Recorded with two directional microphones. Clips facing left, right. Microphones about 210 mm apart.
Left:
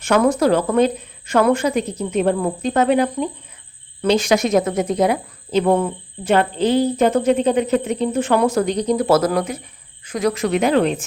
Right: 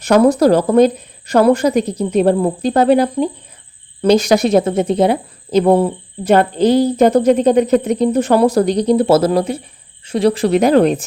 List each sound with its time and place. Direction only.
0.0 s a woman's voice: 35° right (ahead or behind)